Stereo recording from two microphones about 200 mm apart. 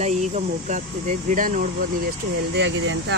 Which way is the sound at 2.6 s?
65° right (ahead or behind).